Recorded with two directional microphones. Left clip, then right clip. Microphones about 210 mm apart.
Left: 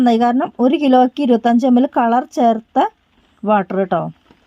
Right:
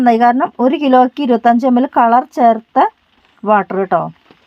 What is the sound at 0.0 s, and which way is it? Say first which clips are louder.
Speech: right 4 dB; 35° left (ahead or behind).